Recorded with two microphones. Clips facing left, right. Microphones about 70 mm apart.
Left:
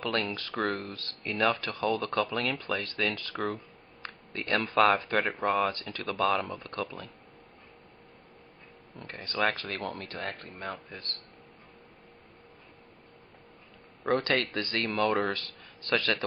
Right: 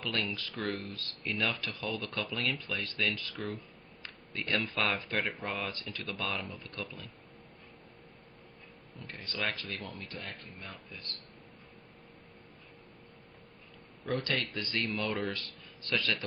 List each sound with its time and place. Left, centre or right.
0.0 s speech: left
9.0 s speech: left
14.0 s speech: left